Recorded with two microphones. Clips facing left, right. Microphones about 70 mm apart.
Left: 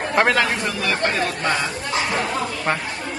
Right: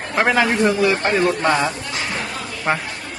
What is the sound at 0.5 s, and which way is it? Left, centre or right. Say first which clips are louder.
Speech: right 7 dB; right.